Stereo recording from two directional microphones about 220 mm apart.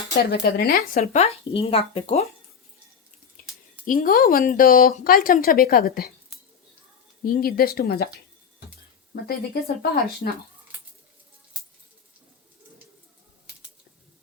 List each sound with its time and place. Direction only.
0.3 s speech: 45° left (ahead or behind)
0.9 s speech: 30° left (ahead or behind)
3.8 s speech: 40° left (ahead or behind)
7.3 s speech: 40° left (ahead or behind)
9.2 s speech: 45° left (ahead or behind)